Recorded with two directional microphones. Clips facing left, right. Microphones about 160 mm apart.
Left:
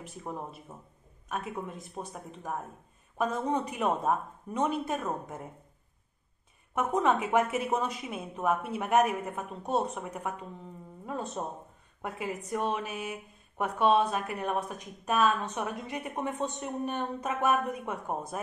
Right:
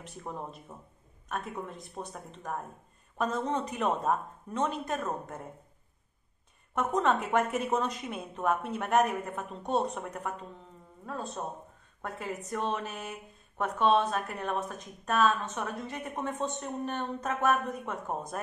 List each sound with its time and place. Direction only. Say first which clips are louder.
0.0 s a woman's voice: left 1 dB; 5° left (ahead or behind)
6.7 s a woman's voice: left 1 dB; 5° left (ahead or behind)